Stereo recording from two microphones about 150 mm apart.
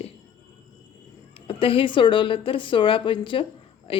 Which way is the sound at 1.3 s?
35° left (ahead or behind).